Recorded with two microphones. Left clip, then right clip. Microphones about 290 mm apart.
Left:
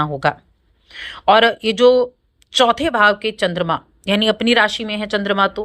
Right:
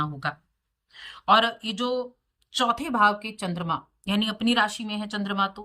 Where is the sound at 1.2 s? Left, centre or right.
Centre.